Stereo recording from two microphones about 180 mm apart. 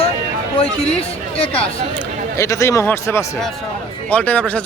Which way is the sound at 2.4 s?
15° left (ahead or behind).